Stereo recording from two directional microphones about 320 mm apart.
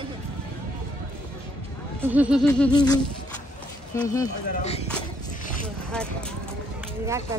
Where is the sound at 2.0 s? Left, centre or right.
Centre.